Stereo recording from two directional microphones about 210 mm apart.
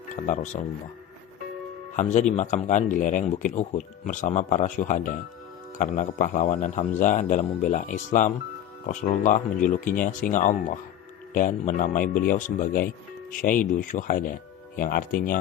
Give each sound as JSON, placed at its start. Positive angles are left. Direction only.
{"t": 2.0, "sound": "speech", "side_deg": 35}